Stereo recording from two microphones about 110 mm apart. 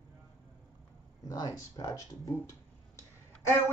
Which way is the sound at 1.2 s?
30° left (ahead or behind).